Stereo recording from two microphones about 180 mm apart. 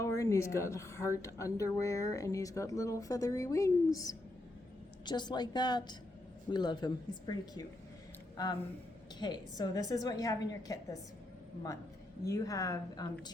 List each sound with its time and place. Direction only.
0.0 s a woman's voice: 15° left (ahead or behind)
9.1 s a woman's voice: 25° left (ahead or behind)
12.2 s a woman's voice: 20° left (ahead or behind)